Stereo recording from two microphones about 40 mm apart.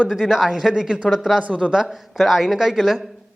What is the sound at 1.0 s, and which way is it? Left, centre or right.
Speech, centre.